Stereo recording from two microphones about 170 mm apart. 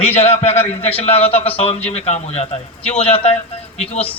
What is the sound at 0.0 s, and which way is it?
Speech, 35° left (ahead or behind).